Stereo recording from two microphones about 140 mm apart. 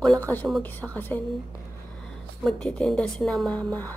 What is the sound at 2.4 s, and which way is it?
A woman's voice, centre (ahead or behind).